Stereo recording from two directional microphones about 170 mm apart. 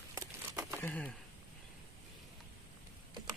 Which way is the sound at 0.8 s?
10° left (ahead or behind).